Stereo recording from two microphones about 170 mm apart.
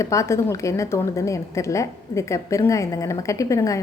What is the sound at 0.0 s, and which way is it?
A woman's voice, 20° left (ahead or behind).